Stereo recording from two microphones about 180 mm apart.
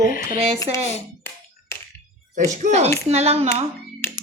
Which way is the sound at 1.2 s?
15° left (ahead or behind).